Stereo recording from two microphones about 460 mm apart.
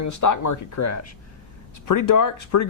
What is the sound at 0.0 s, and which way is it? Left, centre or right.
Speech, left.